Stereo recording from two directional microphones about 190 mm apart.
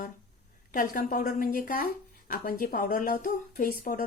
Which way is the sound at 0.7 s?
50° left (ahead or behind).